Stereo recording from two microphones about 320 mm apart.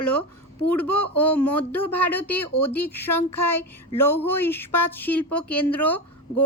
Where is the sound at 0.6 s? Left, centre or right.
Centre.